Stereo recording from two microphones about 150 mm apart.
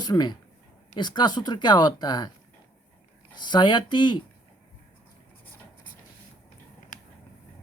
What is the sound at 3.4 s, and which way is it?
Speech, 30° left (ahead or behind).